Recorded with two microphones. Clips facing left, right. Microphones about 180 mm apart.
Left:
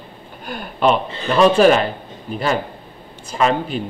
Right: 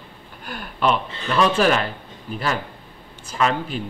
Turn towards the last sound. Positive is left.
turn(degrees=20)  # may be behind; listen again after turning